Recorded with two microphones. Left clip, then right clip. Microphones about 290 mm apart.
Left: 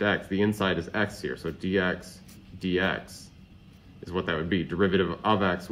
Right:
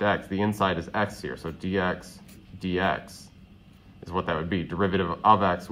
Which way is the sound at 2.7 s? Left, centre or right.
Right.